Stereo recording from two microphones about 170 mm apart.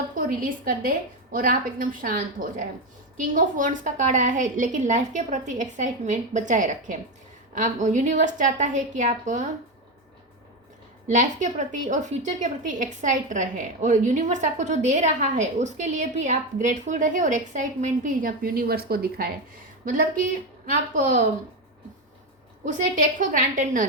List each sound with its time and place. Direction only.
0.1 s a woman's voice: 55° right (ahead or behind)
11.1 s a woman's voice: 45° right (ahead or behind); by 19.3 s 65° right (ahead or behind)
19.8 s a woman's voice: 50° right (ahead or behind)
22.6 s a woman's voice: 50° right (ahead or behind)